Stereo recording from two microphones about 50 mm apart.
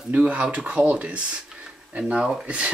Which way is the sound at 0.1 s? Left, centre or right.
Right.